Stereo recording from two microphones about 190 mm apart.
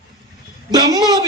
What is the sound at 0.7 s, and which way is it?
Speech, 20° right (ahead or behind).